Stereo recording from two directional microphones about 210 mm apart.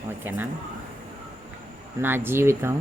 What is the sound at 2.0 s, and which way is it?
Speech, 10° right (ahead or behind).